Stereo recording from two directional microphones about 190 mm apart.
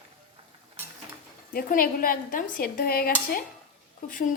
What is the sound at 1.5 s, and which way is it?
Dishes, 50° left (ahead or behind).